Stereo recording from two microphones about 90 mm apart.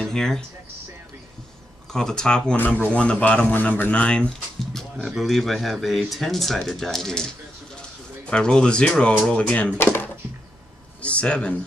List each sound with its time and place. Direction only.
0.0 s speech: 5° left (ahead or behind)
1.9 s speech: 5° left (ahead or behind)
8.3 s speech: 10° left (ahead or behind)